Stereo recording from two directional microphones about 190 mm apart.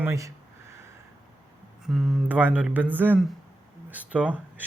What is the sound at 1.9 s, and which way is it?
Speech, centre (ahead or behind).